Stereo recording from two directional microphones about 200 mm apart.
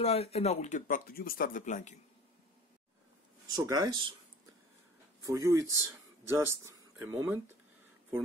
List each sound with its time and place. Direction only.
0.0 s speech: 30° left (ahead or behind)
3.5 s speech: 20° right (ahead or behind)
5.2 s speech: 15° right (ahead or behind)